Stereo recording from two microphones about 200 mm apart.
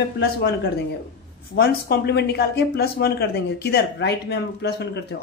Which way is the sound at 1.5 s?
50° left (ahead or behind).